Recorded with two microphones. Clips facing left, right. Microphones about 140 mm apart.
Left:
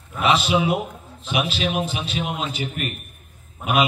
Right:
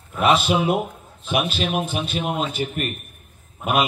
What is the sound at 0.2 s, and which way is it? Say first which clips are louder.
A man's voice: right 1 dB; 50° right (ahead or behind).